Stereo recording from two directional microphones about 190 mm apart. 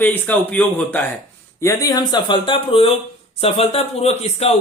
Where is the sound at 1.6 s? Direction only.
20° left (ahead or behind).